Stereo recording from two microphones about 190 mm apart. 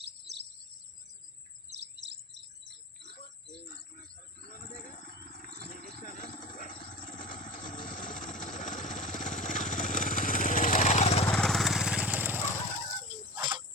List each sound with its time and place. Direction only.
1.8 s chirp: 65° right (ahead or behind)
4.5 s insect: 45° left (ahead or behind)
11.3 s vehicle: centre (ahead or behind); by 13.1 s 20° right (ahead or behind)
13.4 s a sound: 25° right (ahead or behind)